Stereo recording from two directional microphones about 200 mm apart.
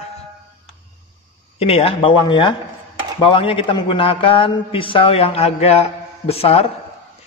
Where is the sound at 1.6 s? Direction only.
30° left (ahead or behind).